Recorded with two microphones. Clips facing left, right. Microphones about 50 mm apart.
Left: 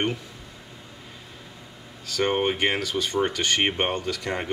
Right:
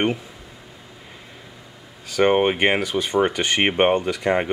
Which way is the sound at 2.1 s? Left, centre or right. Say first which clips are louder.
Right 6 dB; right.